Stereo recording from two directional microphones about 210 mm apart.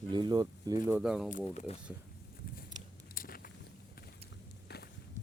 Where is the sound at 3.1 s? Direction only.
45° left (ahead or behind).